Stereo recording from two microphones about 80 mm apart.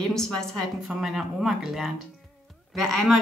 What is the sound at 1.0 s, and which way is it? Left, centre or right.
Speech, centre.